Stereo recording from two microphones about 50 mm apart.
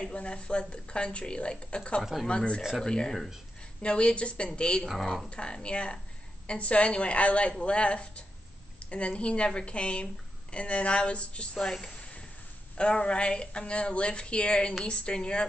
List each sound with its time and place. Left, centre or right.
0.0 s a woman's voice: left
4.8 s speech: centre
5.3 s a woman's voice: centre
12.7 s a woman's voice: centre